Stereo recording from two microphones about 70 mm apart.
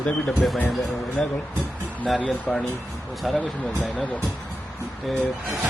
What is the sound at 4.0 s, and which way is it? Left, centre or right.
Speech, left.